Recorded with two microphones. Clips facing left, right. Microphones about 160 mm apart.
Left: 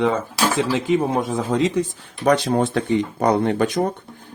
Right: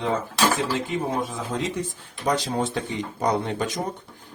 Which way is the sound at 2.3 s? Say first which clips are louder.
Left 7 dB; 60° left (ahead or behind).